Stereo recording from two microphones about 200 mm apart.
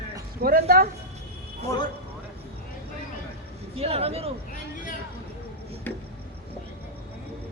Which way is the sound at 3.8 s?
30° right (ahead or behind).